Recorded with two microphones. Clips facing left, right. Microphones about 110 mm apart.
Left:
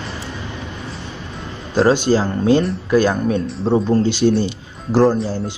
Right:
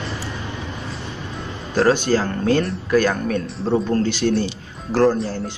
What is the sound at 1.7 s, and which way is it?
Speech, 20° left (ahead or behind).